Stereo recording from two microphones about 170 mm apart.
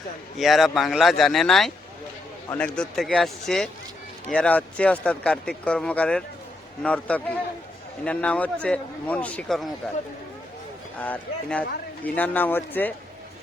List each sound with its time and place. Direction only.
0.3 s speech: centre (ahead or behind)
11.0 s speech: 10° left (ahead or behind)